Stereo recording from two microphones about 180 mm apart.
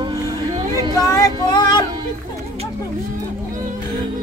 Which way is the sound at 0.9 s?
20° left (ahead or behind).